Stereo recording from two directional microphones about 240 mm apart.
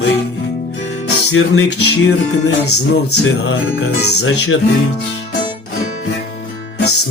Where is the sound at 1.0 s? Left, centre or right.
Left.